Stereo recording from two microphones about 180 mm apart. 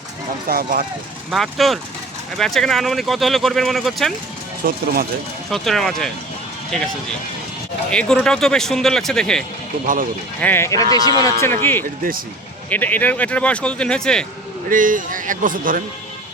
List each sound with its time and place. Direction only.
0.4 s speech: 55° right (ahead or behind)
1.3 s speech: centre (ahead or behind)
4.6 s a man's voice: 50° right (ahead or behind)
5.5 s speech: centre (ahead or behind)
9.8 s a man's voice: 50° right (ahead or behind)
10.4 s speech: 15° left (ahead or behind)
14.7 s a man's voice: 50° right (ahead or behind)